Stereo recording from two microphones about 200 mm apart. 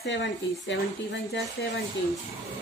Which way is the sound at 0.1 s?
60° left (ahead or behind).